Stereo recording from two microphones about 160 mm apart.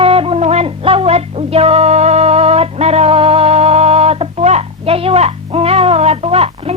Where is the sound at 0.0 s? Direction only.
35° right (ahead or behind).